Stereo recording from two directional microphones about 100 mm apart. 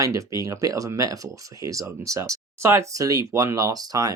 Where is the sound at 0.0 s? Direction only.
30° right (ahead or behind).